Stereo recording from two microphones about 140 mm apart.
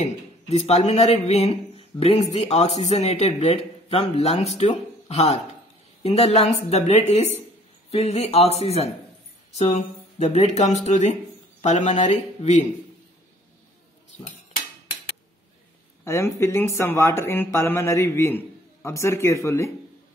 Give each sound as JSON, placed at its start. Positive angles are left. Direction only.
{"t": 0.0, "sound": "speech", "side_deg": 50}
{"t": 16.0, "sound": "speech", "side_deg": 20}